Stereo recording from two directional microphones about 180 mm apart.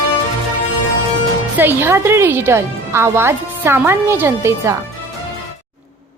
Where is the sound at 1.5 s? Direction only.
10° right (ahead or behind).